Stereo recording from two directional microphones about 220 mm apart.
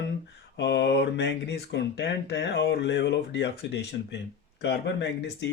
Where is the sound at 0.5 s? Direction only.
50° left (ahead or behind).